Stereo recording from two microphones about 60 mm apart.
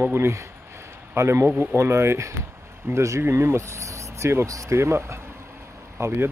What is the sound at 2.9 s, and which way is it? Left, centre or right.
Speech, right.